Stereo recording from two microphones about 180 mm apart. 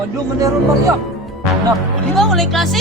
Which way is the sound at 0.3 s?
20° right (ahead or behind).